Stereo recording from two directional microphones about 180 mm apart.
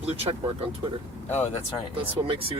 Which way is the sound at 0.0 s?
35° right (ahead or behind).